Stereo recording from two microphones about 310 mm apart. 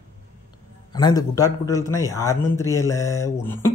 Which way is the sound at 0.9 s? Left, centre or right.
Centre.